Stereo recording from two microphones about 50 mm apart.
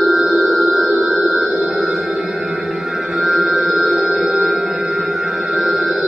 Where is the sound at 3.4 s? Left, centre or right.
Right.